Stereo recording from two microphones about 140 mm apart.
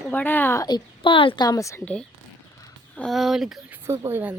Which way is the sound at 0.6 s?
35° left (ahead or behind).